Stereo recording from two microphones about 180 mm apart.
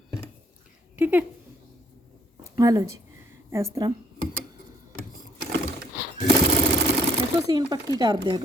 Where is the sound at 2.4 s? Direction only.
20° right (ahead or behind).